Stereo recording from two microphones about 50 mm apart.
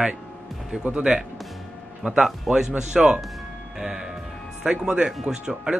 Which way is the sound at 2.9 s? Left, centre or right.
Right.